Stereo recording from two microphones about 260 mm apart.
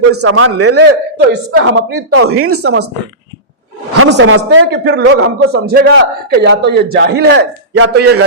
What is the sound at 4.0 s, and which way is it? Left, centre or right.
A man's voice, right.